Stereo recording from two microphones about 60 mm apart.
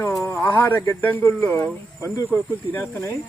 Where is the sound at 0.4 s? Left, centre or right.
Left.